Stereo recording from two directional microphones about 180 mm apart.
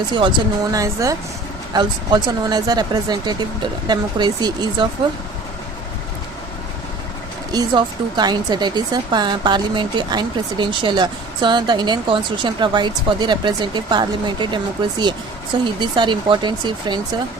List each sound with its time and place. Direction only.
0.1 s speech: 25° right (ahead or behind)
7.5 s speech: 25° right (ahead or behind)